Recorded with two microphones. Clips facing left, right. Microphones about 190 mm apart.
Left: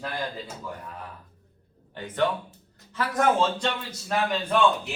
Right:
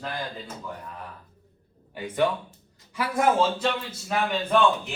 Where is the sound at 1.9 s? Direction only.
10° right (ahead or behind).